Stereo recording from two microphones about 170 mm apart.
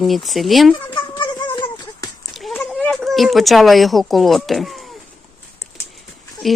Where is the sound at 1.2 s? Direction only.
25° left (ahead or behind).